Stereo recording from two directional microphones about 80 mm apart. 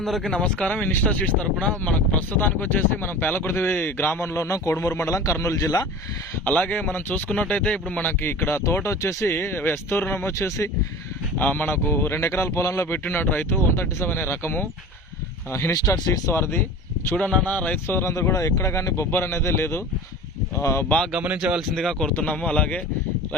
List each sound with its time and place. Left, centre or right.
0.0 s speech: centre; by 5.9 s left
6.4 s speech: centre
8.2 s speech: left
11.3 s speech: left
16.1 s speech: left
17.2 s speech: centre; by 20.8 s left
21.2 s speech: centre
21.8 s speech: centre
22.1 s speech: centre